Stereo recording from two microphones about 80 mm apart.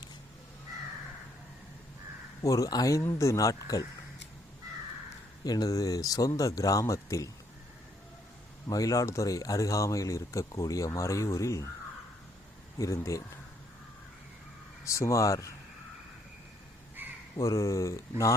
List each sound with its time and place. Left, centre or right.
2.4 s speech: left
3.0 s speech: left
5.5 s speech: left
8.6 s speech: left
12.8 s speech: left
14.8 s speech: left
17.0 s crow: right
17.3 s speech: left